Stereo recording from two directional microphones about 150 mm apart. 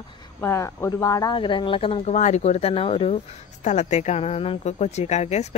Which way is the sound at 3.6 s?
50° left (ahead or behind).